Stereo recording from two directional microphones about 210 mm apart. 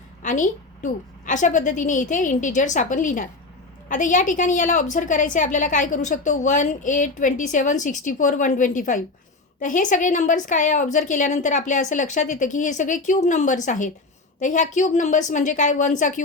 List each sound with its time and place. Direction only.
0.2 s a woman's voice: 35° left (ahead or behind)